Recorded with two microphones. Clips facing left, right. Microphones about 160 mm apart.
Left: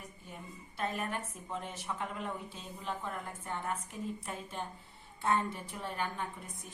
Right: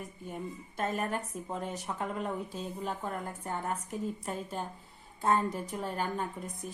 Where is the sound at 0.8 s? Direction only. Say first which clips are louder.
Right 4 dB; 45° right (ahead or behind).